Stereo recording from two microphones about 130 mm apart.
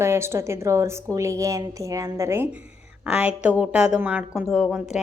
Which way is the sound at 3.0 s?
10° right (ahead or behind).